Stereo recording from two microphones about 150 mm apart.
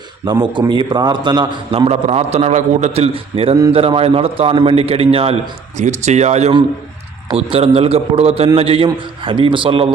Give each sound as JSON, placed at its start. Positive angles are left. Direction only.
{"t": 0.5, "sound": "a man's voice", "side_deg": -30}
{"t": 1.9, "sound": "a man's voice", "side_deg": -45}